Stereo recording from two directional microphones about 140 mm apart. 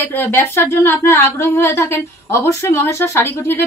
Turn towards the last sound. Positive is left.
turn(degrees=15)  # may be behind; listen again after turning